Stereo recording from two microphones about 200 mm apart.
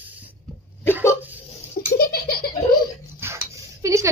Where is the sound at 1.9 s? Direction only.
50° left (ahead or behind).